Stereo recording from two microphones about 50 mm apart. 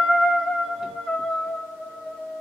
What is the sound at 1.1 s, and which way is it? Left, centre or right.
Music, centre.